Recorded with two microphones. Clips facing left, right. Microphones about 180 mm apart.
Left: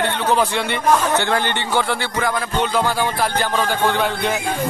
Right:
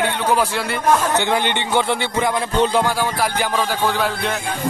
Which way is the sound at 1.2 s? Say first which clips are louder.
Right 1 dB; 15° right (ahead or behind).